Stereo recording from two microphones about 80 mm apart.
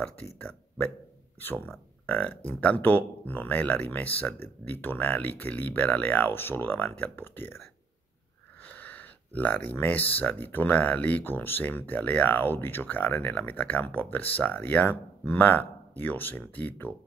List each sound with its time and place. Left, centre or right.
0.0 s speech: centre
8.6 s speech: centre